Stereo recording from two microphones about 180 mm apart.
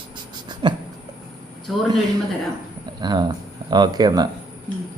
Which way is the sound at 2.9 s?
20° right (ahead or behind).